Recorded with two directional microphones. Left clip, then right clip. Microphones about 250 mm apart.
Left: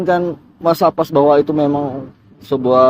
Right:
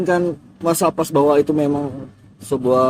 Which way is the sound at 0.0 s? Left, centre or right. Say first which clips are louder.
Left 2 dB; centre.